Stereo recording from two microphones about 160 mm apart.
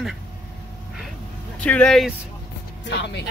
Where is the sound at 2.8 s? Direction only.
90° left.